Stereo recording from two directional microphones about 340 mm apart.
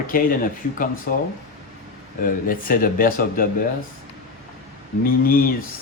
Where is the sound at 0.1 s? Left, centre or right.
Left.